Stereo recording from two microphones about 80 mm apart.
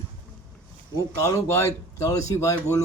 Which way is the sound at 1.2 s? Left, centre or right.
Left.